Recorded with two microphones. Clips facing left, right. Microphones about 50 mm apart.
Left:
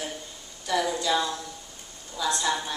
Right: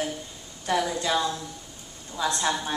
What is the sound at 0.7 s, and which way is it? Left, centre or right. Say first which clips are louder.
Speech: right 1 dB; right.